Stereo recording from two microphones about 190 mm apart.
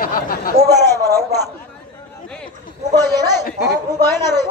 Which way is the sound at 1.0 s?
20° right (ahead or behind).